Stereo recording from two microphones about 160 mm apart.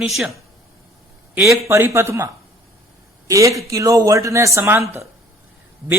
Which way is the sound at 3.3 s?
20° right (ahead or behind).